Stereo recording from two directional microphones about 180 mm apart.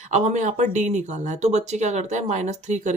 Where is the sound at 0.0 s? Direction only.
40° right (ahead or behind).